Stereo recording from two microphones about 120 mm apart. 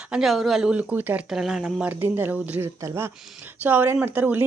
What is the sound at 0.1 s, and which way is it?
Speech, centre (ahead or behind).